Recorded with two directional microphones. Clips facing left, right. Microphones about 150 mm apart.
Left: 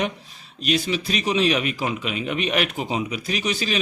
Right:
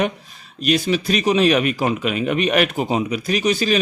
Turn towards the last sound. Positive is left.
turn(degrees=-45)  # may be behind; listen again after turning